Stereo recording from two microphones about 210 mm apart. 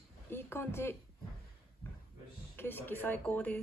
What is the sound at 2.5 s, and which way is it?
Speech, 10° left (ahead or behind).